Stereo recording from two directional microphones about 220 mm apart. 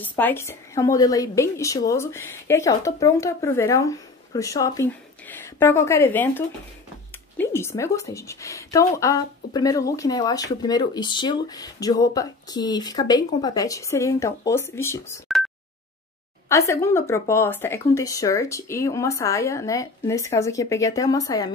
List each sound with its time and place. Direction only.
0.0 s a woman's voice: 10° left (ahead or behind)
16.4 s a woman's voice: 15° left (ahead or behind)